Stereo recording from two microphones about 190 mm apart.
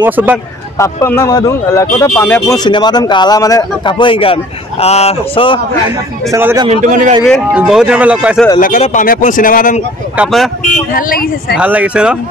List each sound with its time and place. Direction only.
0.0 s speech: 10° right (ahead or behind)
0.7 s speech: 15° left (ahead or behind)
2.5 s a man's voice: 20° left (ahead or behind)
6.3 s speech: 15° right (ahead or behind)
6.7 s a man's voice: 45° right (ahead or behind)
7.2 s speech: centre (ahead or behind)
8.5 s speech: 45° left (ahead or behind)
10.1 s speech: centre (ahead or behind)
11.0 s speech: 50° left (ahead or behind)
11.5 s speech: 5° right (ahead or behind)